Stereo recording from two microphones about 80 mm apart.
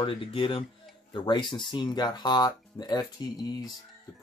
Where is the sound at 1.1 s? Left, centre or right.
Left.